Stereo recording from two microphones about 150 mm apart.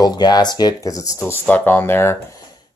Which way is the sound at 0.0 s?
25° left (ahead or behind).